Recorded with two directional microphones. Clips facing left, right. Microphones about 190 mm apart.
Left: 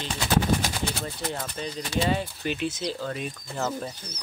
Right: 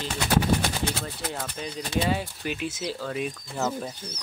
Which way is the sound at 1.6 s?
5° right (ahead or behind).